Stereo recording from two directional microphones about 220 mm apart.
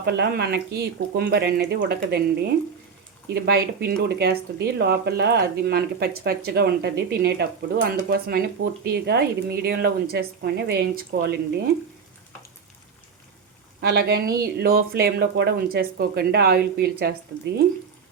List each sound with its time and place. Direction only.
0.0 s speech: 50° right (ahead or behind)
3.3 s speech: 45° right (ahead or behind)
13.8 s speech: 45° right (ahead or behind)